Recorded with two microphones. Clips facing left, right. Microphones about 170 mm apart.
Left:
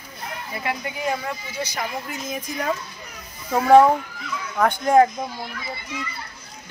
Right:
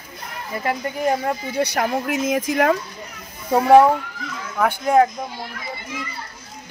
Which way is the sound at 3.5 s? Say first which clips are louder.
Right 1 dB; 20° right (ahead or behind).